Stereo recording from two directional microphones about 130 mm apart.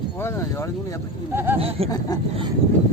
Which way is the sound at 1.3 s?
15° right (ahead or behind).